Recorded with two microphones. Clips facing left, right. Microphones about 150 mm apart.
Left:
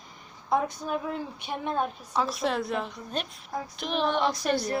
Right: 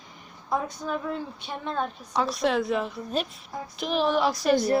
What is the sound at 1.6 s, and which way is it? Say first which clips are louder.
Speech: left 1 dB; 15° left (ahead or behind).